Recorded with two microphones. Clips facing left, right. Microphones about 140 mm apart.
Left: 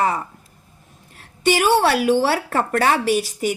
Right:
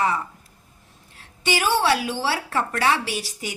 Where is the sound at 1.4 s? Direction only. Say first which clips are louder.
Left 5 dB; 55° left (ahead or behind).